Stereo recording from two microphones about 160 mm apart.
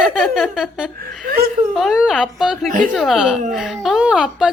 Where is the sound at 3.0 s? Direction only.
Centre (ahead or behind).